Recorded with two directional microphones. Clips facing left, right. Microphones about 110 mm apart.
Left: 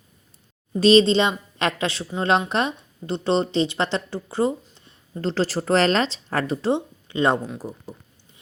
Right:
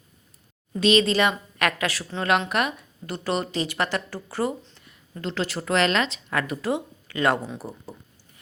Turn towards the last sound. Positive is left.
turn(degrees=-15)  # may be behind; listen again after turning